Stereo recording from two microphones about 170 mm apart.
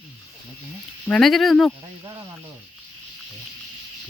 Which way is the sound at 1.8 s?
20° right (ahead or behind).